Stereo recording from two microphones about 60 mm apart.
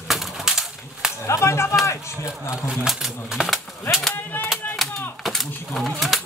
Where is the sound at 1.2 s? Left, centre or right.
Left.